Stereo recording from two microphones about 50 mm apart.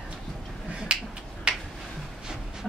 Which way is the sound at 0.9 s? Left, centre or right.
Centre.